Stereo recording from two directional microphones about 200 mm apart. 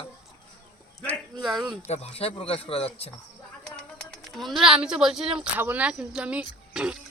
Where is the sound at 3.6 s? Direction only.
Centre (ahead or behind).